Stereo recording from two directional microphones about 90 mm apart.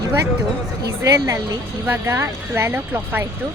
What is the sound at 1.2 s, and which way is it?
Speech, 50° right (ahead or behind).